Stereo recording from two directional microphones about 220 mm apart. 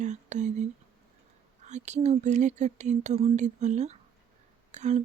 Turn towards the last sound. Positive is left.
turn(degrees=-30)  # may be behind; listen again after turning